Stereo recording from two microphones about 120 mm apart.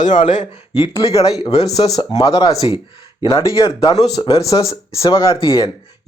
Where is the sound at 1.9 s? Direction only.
30° left (ahead or behind).